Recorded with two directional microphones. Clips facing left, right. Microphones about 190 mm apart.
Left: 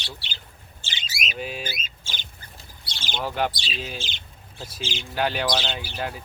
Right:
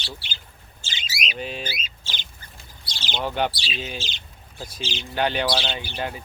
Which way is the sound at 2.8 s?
60° left (ahead or behind).